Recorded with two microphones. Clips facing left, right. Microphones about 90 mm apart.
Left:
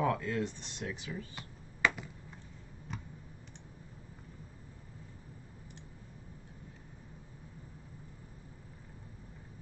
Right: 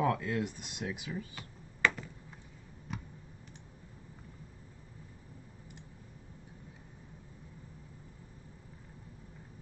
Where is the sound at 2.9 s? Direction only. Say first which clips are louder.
Right 2 dB; centre (ahead or behind).